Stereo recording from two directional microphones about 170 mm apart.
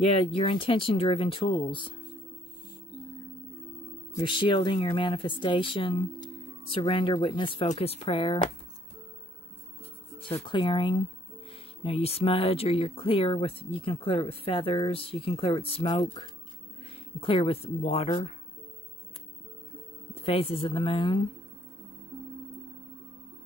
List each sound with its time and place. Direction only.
0.0 s speech: 35° left (ahead or behind)
4.2 s speech: 30° left (ahead or behind)
10.2 s speech: 30° left (ahead or behind)
20.2 s speech: 35° left (ahead or behind)